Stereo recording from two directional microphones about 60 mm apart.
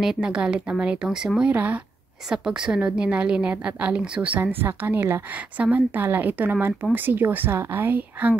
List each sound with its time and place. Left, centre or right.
0.0 s a woman's voice: centre
1.5 s speech: right
2.2 s a woman's voice: centre
4.4 s speech: right
5.6 s speech: right